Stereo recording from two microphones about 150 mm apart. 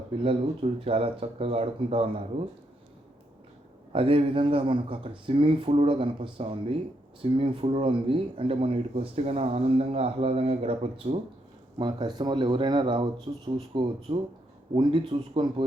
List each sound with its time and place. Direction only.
0.2 s speech: 40° right (ahead or behind)
3.9 s speech: 35° right (ahead or behind)
11.8 s speech: 30° right (ahead or behind)